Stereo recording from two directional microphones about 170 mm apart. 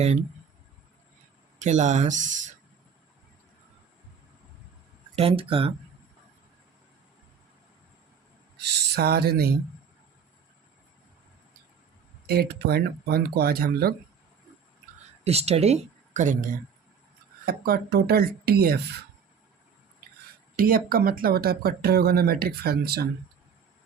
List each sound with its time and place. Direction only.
1.5 s speech: 45° right (ahead or behind)
5.1 s speech: 35° right (ahead or behind)
8.6 s speech: 75° right (ahead or behind)
12.2 s speech: 65° right (ahead or behind)
15.2 s speech: 35° right (ahead or behind)
17.4 s speech: 65° right (ahead or behind)
20.6 s speech: 55° right (ahead or behind)